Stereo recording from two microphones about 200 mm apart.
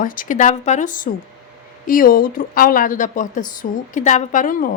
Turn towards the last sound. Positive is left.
turn(degrees=40)  # may be behind; listen again after turning